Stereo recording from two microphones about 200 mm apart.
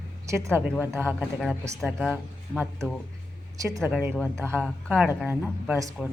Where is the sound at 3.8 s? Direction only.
10° right (ahead or behind).